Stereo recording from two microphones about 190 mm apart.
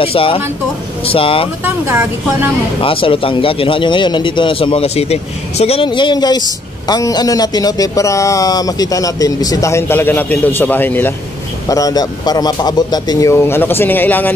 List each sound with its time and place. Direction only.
0.0 s a man's voice: 30° left (ahead or behind)
1.6 s speech: 10° right (ahead or behind)
2.8 s a man's voice: 30° left (ahead or behind); by 14.3 s 10° left (ahead or behind)